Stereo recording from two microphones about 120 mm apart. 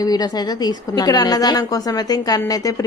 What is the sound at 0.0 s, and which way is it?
A woman's voice, 35° left (ahead or behind).